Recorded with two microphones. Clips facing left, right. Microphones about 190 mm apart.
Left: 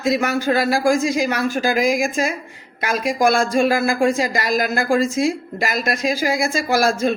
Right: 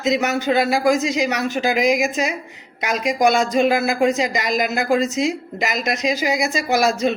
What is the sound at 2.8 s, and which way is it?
Speech, 20° right (ahead or behind).